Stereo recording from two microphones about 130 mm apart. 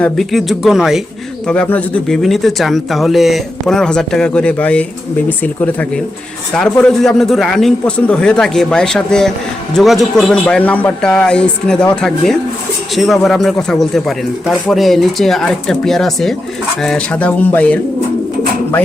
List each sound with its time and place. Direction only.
0.0 s speech: centre (ahead or behind)
1.5 s speech: 10° left (ahead or behind)